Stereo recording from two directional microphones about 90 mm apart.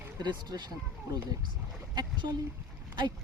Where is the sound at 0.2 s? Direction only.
50° right (ahead or behind).